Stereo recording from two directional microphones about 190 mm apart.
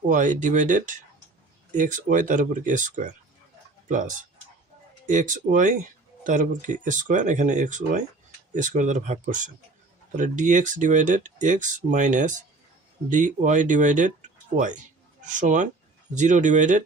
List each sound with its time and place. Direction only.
0.1 s speech: 45° right (ahead or behind)